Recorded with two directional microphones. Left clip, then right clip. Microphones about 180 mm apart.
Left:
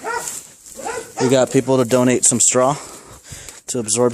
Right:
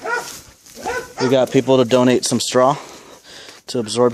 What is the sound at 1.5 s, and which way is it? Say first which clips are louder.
Speech: right 2 dB; 5° left (ahead or behind).